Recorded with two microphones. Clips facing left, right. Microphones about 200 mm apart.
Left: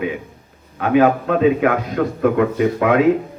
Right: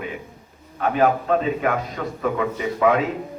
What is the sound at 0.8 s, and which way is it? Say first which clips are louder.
A man's voice: left 5 dB; 65° left (ahead or behind).